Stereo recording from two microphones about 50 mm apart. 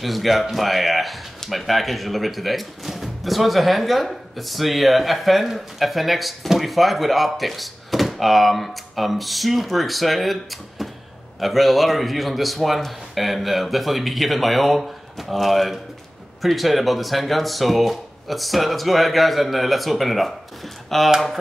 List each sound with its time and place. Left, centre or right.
0.0 s speech: centre